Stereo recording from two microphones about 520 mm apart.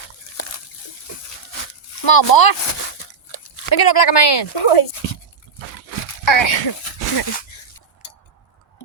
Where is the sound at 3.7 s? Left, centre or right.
Left.